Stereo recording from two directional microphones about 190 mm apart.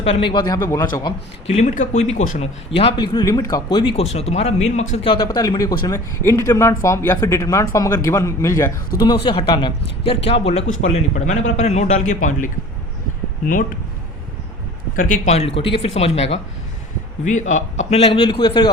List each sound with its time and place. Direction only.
0.0 s speech: 30° left (ahead or behind)
1.5 s speech: 40° left (ahead or behind)
4.1 s speech: 35° left (ahead or behind); by 8.7 s 15° left (ahead or behind)
9.0 s speech: 25° left (ahead or behind); by 12.5 s 45° left (ahead or behind)
15.1 s speech: 40° left (ahead or behind)
17.9 s speech: 30° left (ahead or behind)